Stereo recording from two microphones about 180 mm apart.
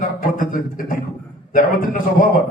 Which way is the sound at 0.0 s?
50° left (ahead or behind).